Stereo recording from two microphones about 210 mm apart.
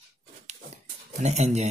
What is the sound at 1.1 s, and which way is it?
Speech, 35° right (ahead or behind).